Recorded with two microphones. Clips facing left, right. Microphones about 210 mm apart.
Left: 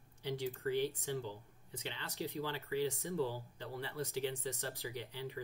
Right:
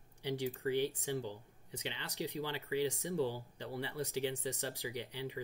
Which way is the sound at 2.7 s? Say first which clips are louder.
Right 2 dB; 70° right (ahead or behind).